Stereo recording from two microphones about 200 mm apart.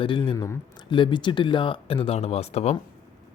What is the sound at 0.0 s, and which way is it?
Speech, 25° left (ahead or behind).